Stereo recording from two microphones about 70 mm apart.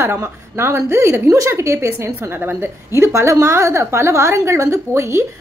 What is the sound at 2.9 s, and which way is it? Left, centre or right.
A woman's voice, right.